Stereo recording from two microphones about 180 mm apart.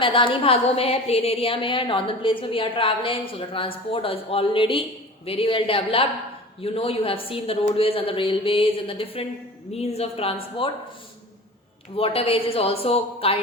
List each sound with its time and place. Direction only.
0.0 s a woman's voice: 30° left (ahead or behind)
11.9 s a woman's voice: 30° left (ahead or behind)